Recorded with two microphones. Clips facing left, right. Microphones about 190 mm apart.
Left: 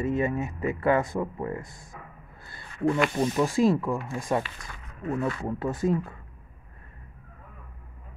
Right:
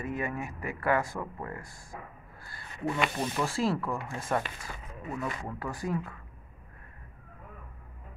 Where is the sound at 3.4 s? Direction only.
15° left (ahead or behind).